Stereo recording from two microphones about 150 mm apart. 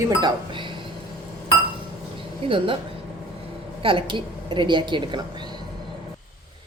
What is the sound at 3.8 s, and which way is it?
A woman's voice, 35° right (ahead or behind).